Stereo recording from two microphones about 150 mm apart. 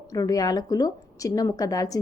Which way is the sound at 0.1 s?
25° left (ahead or behind).